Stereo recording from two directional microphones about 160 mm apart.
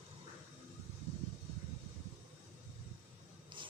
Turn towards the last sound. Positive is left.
turn(degrees=-30)  # may be behind; listen again after turning